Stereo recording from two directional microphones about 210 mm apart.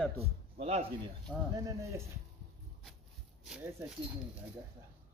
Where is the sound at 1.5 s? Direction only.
15° right (ahead or behind).